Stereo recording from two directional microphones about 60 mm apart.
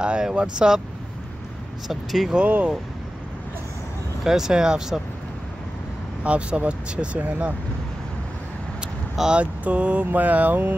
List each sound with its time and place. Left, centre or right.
0.0 s speech: centre
1.9 s speech: centre
2.3 s speech: right
4.2 s speech: centre
6.2 s speech: right
9.1 s speech: centre
9.4 s speech: right